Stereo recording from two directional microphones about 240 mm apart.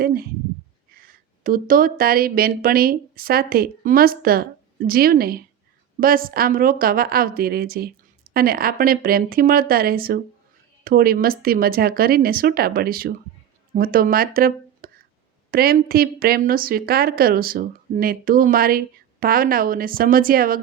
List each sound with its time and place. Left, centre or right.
0.0 s speech: right